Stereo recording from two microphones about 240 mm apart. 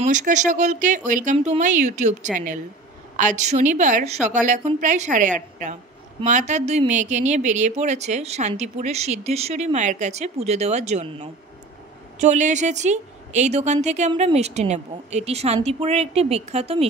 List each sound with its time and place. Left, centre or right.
0.0 s speech: right